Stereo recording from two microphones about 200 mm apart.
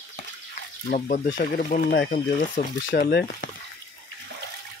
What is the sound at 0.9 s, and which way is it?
Speech, 35° left (ahead or behind).